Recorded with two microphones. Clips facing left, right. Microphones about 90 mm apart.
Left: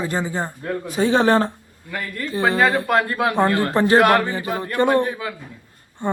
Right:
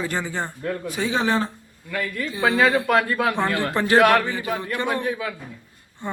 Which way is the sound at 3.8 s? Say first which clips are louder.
Left 1 dB; 35° left (ahead or behind).